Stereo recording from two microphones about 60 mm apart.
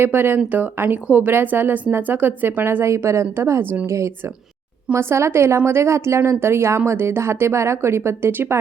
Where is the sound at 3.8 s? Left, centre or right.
Right.